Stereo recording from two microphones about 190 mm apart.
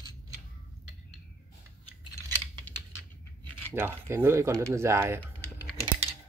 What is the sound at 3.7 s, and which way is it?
Speech, 10° right (ahead or behind).